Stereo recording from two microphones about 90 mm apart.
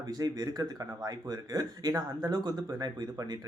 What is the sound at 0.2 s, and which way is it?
Speech, 45° right (ahead or behind).